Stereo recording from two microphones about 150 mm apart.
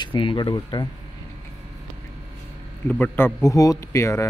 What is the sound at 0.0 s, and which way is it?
Speech, 35° left (ahead or behind).